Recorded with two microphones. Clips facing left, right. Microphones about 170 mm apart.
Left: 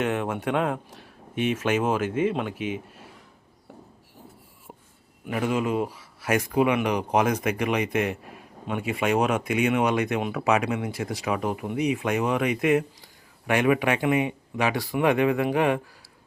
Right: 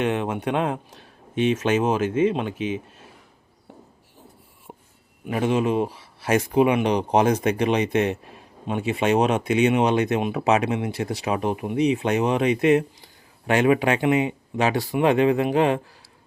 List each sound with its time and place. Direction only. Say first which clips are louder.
0.0 s speech: right 2 dB; 20° right (ahead or behind)
5.2 s speech: right 4 dB; 25° right (ahead or behind)